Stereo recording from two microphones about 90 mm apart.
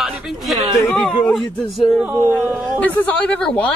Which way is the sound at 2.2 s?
25° right (ahead or behind).